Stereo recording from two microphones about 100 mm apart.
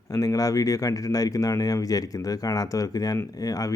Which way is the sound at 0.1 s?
35° left (ahead or behind).